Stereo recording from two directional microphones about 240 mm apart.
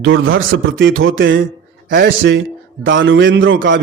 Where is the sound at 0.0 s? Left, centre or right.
Right.